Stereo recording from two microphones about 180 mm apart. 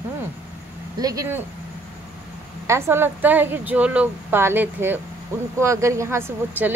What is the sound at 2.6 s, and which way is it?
A woman's voice, 15° right (ahead or behind).